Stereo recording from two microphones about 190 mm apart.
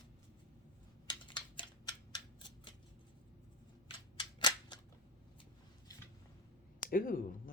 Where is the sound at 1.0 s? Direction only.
25° left (ahead or behind).